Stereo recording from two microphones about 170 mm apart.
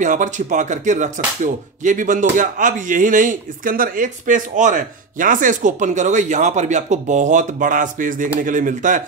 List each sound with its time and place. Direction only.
0.0 s speech: 45° right (ahead or behind)